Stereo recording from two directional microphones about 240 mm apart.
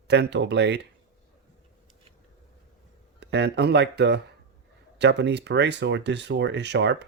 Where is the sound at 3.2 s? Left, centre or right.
Right.